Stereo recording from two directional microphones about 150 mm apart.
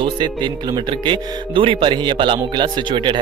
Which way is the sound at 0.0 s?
30° right (ahead or behind).